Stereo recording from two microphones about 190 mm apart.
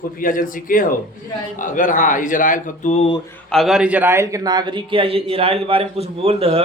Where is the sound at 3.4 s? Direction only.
Centre (ahead or behind).